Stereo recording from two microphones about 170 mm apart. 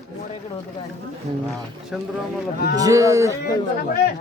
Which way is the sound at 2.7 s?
20° right (ahead or behind).